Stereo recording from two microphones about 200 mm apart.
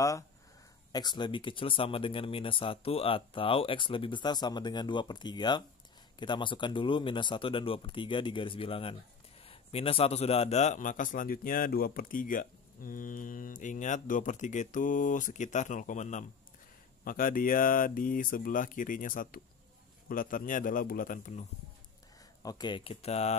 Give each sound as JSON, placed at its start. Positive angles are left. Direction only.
{"t": 0.9, "sound": "a man's voice", "side_deg": 20}
{"t": 22.4, "sound": "speech", "side_deg": 20}